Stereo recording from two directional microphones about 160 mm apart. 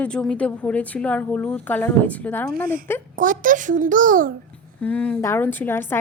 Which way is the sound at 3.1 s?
55° right (ahead or behind).